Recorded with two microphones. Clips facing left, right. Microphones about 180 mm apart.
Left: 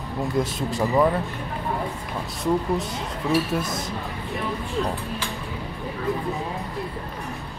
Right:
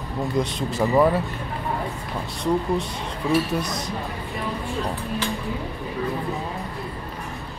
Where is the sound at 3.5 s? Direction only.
Centre (ahead or behind).